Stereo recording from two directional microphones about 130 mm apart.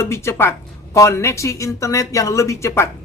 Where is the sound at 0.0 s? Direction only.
20° left (ahead or behind).